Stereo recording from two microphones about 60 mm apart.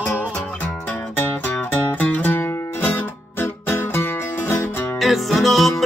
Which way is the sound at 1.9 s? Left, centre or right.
Left.